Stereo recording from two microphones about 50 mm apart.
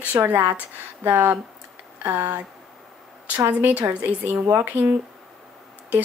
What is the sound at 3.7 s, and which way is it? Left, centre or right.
Speech, right.